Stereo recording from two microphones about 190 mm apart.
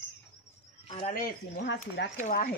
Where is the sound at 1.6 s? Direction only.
60° left (ahead or behind).